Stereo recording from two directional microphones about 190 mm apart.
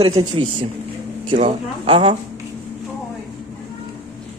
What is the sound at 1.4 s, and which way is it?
Speech, 30° right (ahead or behind).